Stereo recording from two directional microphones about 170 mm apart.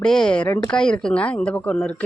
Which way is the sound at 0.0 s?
5° left (ahead or behind).